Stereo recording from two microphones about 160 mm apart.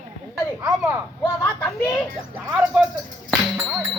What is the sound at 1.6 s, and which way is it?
Speech, 15° left (ahead or behind).